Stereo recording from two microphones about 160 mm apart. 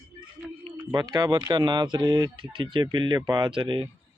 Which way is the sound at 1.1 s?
25° right (ahead or behind).